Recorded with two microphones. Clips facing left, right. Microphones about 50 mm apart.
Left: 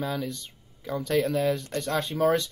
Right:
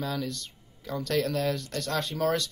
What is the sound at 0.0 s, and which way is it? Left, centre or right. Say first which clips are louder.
Speech: left 2 dB; centre.